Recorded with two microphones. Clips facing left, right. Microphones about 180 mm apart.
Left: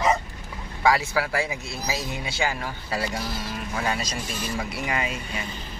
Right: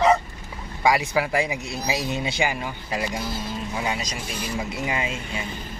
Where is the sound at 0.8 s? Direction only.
15° right (ahead or behind).